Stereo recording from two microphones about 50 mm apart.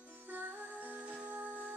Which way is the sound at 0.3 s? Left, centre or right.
Right.